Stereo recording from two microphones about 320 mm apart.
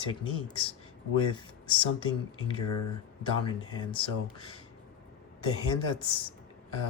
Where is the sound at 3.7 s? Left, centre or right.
Centre.